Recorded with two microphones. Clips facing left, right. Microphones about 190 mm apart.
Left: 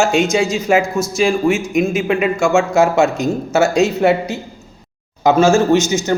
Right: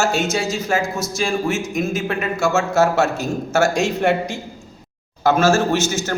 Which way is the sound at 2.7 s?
5° right (ahead or behind).